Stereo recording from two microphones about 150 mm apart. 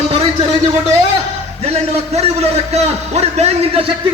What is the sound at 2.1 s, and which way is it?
A man's voice, 45° right (ahead or behind).